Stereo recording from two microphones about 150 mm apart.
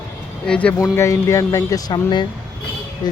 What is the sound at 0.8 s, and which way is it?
Speech, 20° left (ahead or behind).